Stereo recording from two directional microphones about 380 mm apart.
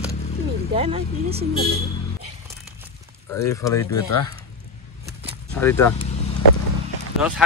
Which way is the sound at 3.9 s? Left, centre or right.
Left.